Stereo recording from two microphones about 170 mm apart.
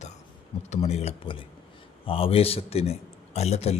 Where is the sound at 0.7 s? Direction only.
40° left (ahead or behind).